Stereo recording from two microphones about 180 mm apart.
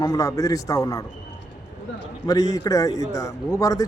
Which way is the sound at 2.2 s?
20° left (ahead or behind).